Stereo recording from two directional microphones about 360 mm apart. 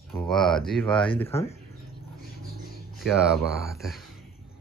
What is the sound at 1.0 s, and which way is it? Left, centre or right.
Speech, centre.